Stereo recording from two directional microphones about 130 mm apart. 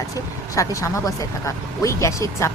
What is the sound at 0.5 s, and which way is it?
Speech, 25° left (ahead or behind).